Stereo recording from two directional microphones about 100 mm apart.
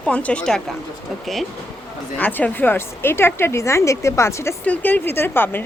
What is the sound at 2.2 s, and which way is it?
A woman's voice, 20° left (ahead or behind).